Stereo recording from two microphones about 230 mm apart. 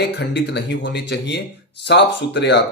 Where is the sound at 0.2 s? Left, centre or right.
Left.